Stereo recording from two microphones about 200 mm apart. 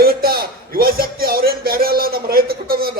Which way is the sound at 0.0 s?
50° right (ahead or behind).